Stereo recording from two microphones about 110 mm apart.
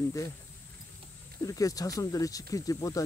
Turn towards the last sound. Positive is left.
turn(degrees=30)  # may be behind; listen again after turning